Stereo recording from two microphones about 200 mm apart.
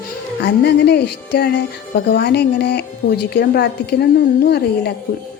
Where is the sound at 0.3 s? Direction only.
55° left (ahead or behind).